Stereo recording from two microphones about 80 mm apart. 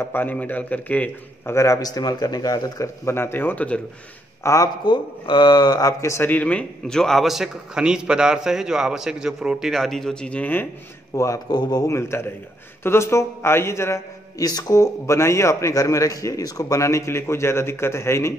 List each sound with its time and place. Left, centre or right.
0.0 s a man's voice: left
1.4 s a man's voice: left
2.0 s speech: left
3.1 s a man's voice: left
4.4 s speech: left
4.8 s speech: left
5.9 s a man's voice: left
6.2 s a man's voice: centre
11.1 s a man's voice: left
11.4 s speech: left
11.9 s a man's voice: left
14.4 s a man's voice: left